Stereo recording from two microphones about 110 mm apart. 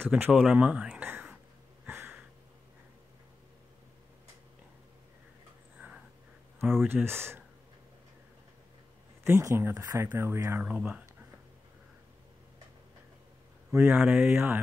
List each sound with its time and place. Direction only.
0.0 s speech: 15° right (ahead or behind)
0.3 s speech: 5° right (ahead or behind)
1.9 s a sound: 20° right (ahead or behind)
6.9 s speech: 20° right (ahead or behind)
9.2 s speech: 25° right (ahead or behind)
10.6 s speech: 10° right (ahead or behind)
13.7 s speech: 20° right (ahead or behind)